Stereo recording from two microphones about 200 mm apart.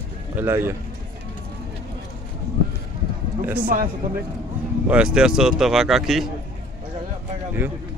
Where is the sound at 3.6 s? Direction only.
45° right (ahead or behind).